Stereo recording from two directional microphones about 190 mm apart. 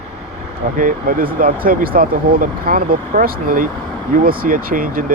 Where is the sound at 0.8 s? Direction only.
45° right (ahead or behind).